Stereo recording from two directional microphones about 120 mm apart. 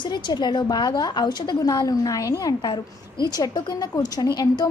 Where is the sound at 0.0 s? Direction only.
40° left (ahead or behind).